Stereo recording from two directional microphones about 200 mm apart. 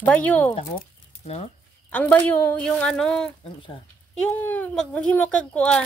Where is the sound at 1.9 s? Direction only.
5° left (ahead or behind).